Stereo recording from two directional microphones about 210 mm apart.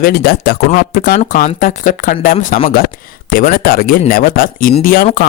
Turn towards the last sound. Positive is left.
turn(degrees=45)  # may be behind; listen again after turning